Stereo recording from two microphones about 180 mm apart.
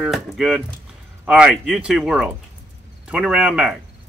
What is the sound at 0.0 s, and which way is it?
Speech, centre (ahead or behind).